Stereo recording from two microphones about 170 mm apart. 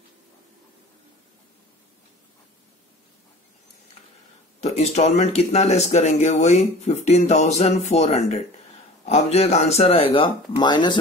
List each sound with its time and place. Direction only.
4.6 s speech: 40° left (ahead or behind)